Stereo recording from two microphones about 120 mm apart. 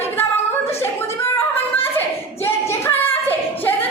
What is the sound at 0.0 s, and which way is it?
Singing, 20° left (ahead or behind).